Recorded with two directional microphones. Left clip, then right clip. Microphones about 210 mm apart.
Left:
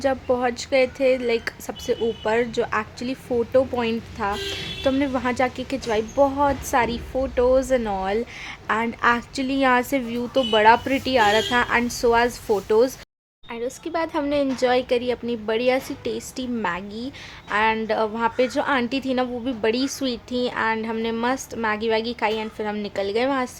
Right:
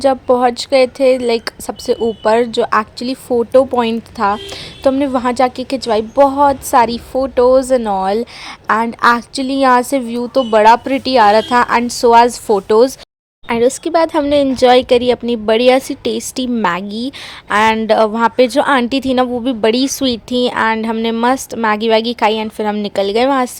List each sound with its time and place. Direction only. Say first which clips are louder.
0.0 s a woman's voice: right 10 dB; 30° right (ahead or behind)